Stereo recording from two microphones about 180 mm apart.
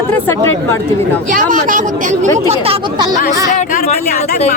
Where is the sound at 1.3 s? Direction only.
50° right (ahead or behind); by 3.1 s 25° right (ahead or behind).